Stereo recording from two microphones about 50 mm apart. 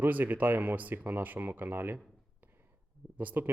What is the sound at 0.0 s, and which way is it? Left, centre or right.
Speech, right.